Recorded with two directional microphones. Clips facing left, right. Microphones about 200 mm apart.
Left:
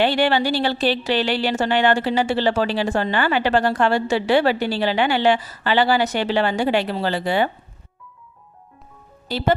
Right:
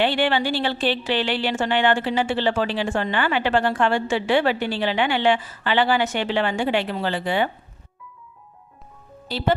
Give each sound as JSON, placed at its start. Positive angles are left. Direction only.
{"t": 0.0, "sound": "speech", "side_deg": 40}